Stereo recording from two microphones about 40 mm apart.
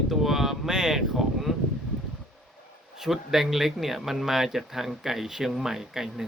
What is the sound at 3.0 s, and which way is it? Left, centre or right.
A man's voice, centre.